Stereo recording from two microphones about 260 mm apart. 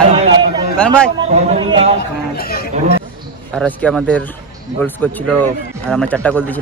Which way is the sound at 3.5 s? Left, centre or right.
Centre.